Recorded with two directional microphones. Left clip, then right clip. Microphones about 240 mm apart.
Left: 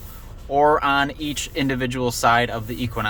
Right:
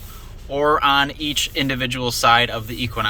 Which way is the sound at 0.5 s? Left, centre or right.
Centre.